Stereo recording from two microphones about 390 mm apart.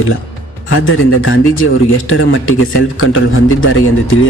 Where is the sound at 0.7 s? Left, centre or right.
Left.